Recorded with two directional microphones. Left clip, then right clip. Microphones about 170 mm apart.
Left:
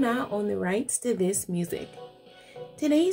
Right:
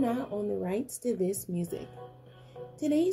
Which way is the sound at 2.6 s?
15° right (ahead or behind).